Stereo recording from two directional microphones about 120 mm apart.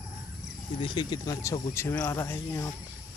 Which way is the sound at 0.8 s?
40° left (ahead or behind).